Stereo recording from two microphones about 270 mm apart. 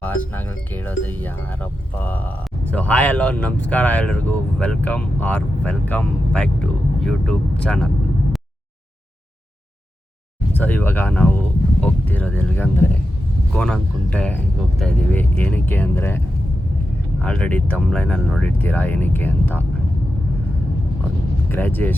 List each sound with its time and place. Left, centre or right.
0.0 s speech: centre
10.6 s speech: centre
21.5 s speech: centre